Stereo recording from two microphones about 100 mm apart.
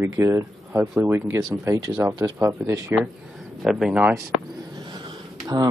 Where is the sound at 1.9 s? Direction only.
35° right (ahead or behind).